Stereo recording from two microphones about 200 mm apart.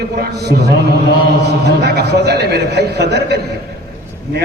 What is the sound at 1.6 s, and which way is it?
A man's voice, 55° right (ahead or behind).